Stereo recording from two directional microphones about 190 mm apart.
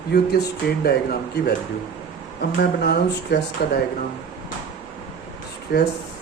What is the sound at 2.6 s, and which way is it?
Speech, 55° left (ahead or behind).